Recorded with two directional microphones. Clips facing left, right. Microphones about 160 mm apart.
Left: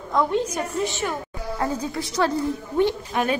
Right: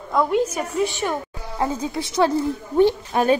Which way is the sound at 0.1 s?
10° right (ahead or behind).